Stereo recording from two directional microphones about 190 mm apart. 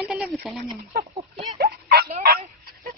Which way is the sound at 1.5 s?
55° right (ahead or behind).